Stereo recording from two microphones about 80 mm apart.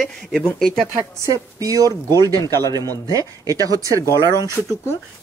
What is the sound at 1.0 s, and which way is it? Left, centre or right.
Speech, right.